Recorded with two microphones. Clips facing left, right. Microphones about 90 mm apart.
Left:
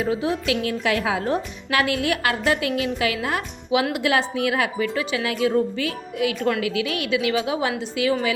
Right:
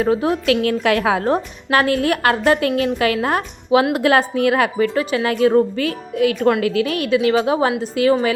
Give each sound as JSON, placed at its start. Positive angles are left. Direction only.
{"t": 0.0, "sound": "a woman's voice", "side_deg": -50}
{"t": 1.3, "sound": "a woman's voice", "side_deg": -40}